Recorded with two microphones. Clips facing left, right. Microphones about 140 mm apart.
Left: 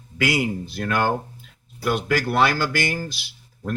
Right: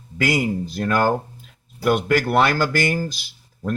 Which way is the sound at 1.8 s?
55° right (ahead or behind).